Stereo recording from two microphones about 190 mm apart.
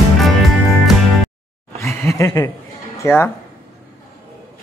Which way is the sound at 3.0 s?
10° left (ahead or behind).